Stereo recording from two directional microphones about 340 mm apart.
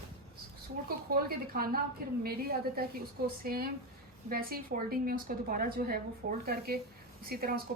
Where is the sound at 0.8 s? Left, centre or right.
Right.